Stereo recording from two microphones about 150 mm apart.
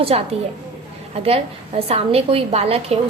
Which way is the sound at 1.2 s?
40° right (ahead or behind).